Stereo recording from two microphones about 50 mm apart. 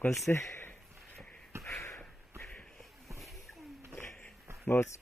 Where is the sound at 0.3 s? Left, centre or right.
Left.